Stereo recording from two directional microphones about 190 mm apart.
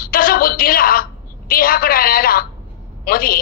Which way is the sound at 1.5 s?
50° left (ahead or behind).